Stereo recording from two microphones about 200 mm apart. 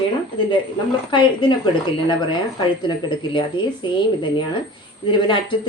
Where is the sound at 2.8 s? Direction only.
25° left (ahead or behind).